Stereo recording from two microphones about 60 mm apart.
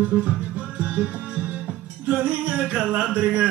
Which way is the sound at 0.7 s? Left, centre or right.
Right.